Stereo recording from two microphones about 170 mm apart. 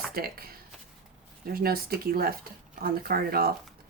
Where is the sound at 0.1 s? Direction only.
60° right (ahead or behind).